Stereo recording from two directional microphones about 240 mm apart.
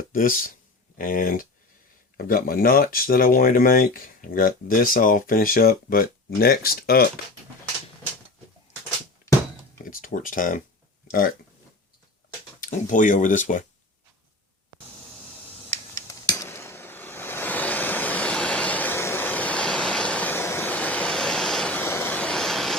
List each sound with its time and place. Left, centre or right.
0.1 s speech: left
9.8 s speech: left
12.5 s speech: left
15.7 s a sound: centre